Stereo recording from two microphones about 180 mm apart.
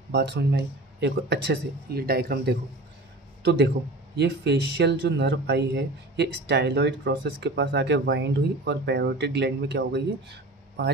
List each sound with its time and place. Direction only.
0.1 s speech: 70° right (ahead or behind)
3.4 s speech: 70° right (ahead or behind)